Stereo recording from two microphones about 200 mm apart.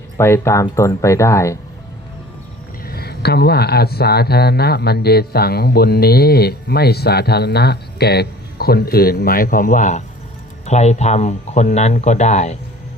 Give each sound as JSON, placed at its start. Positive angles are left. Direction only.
{"t": 0.2, "sound": "speech", "side_deg": 15}
{"t": 2.8, "sound": "speech", "side_deg": 50}